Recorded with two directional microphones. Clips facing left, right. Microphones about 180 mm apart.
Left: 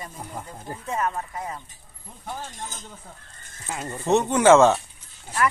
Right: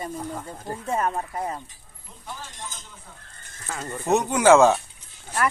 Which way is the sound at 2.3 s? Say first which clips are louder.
Left 3 dB; 50° left (ahead or behind).